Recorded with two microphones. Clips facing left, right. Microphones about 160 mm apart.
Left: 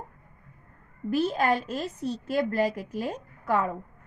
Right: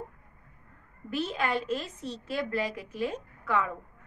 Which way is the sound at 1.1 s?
40° left (ahead or behind).